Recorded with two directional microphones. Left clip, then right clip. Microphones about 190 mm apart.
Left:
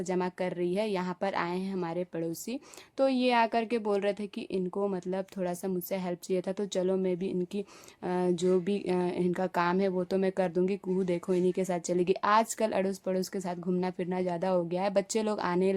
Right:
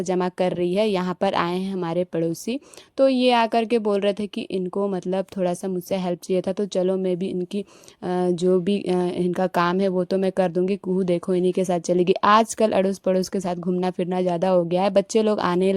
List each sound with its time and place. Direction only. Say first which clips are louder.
0.0 s speech: right 9 dB; 40° right (ahead or behind)